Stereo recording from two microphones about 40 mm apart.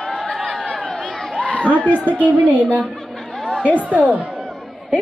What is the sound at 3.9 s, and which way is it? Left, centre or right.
Speech, right.